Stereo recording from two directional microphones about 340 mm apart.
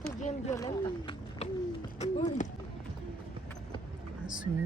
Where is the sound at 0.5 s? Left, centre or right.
Centre.